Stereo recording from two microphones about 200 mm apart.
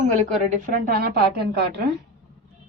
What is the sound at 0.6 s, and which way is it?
A woman's voice, 45° right (ahead or behind).